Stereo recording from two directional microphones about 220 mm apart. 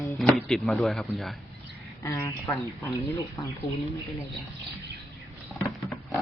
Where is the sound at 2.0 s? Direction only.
10° left (ahead or behind).